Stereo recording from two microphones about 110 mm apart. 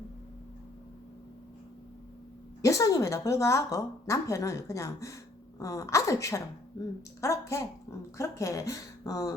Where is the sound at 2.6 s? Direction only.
30° left (ahead or behind).